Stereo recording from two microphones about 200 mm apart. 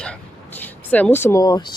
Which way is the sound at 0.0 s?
5° left (ahead or behind).